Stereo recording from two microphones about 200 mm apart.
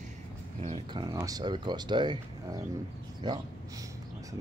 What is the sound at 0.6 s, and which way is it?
Speech, 30° right (ahead or behind).